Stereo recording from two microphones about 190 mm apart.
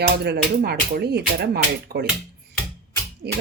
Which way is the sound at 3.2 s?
60° right (ahead or behind).